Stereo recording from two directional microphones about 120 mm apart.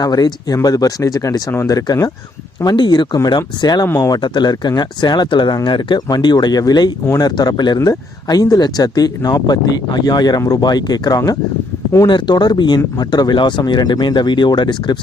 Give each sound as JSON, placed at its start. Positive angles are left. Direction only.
{"t": 0.0, "sound": "speech", "side_deg": 35}
{"t": 3.8, "sound": "speech", "side_deg": 25}
{"t": 4.2, "sound": "speech", "side_deg": 40}